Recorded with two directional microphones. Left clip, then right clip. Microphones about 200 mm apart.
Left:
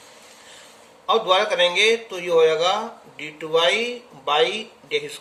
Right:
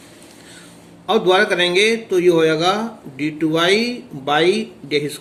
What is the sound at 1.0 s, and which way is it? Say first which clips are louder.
Speech: right 4 dB; 25° right (ahead or behind).